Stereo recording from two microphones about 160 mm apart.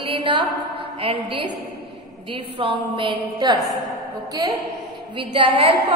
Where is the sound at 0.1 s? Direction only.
30° right (ahead or behind).